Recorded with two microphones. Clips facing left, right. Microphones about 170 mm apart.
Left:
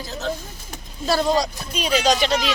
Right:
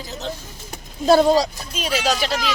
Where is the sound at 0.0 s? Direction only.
20° right (ahead or behind).